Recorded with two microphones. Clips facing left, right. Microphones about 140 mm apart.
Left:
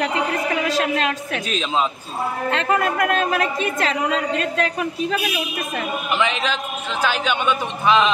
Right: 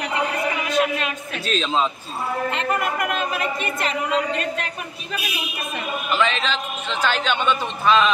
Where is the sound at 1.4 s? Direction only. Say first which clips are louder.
Right 1 dB; 10° left (ahead or behind).